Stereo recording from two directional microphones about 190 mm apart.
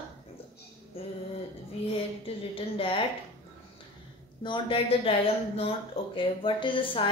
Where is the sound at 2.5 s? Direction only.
30° left (ahead or behind).